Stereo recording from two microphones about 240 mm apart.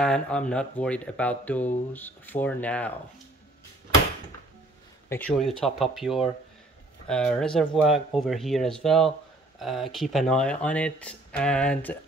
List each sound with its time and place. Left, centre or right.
0.0 s speech: centre
5.1 s speech: centre